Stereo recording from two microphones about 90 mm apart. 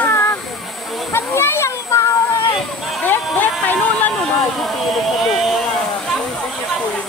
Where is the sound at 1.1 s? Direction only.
25° left (ahead or behind).